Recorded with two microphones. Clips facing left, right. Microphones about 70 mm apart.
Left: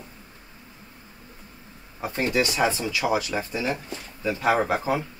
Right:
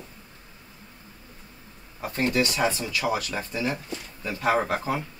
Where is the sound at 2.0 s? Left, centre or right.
Centre.